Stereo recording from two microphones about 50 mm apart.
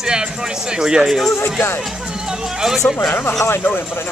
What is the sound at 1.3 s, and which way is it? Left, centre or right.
Speech, left.